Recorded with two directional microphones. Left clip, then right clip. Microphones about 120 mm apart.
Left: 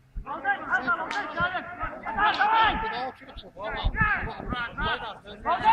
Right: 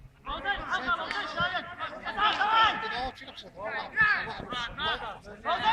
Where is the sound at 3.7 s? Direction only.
40° right (ahead or behind).